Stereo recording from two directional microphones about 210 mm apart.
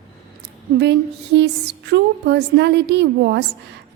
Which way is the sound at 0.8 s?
55° right (ahead or behind).